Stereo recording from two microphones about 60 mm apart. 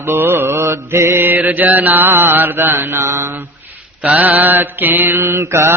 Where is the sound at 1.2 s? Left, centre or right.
Right.